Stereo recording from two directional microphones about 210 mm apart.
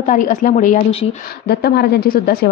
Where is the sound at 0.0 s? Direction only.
35° left (ahead or behind).